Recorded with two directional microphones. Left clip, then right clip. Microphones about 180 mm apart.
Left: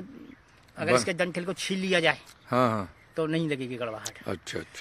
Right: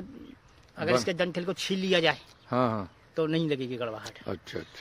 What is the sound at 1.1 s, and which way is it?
Speech, 20° right (ahead or behind).